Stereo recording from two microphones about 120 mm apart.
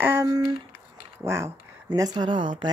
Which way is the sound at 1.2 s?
25° right (ahead or behind).